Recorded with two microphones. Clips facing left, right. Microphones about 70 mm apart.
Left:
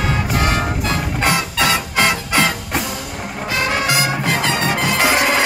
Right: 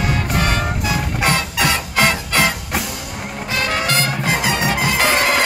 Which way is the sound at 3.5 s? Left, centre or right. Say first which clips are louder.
Left 1 dB; left.